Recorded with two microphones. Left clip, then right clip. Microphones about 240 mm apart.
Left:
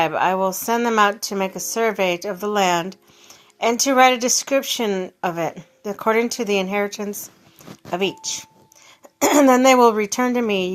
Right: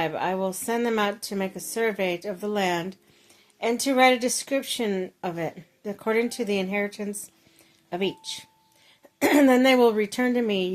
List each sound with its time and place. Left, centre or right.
0.0 s a woman's voice: centre